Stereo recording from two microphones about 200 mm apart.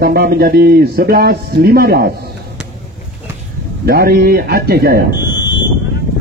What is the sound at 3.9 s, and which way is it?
Speech, 50° right (ahead or behind).